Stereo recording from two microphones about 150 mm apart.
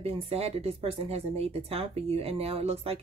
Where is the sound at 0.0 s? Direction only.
40° right (ahead or behind).